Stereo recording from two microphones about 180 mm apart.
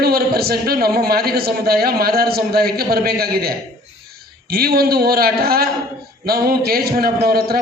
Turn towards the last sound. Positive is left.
turn(degrees=-55)  # may be behind; listen again after turning